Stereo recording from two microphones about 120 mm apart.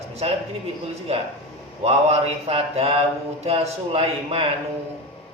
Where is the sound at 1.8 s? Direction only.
60° right (ahead or behind).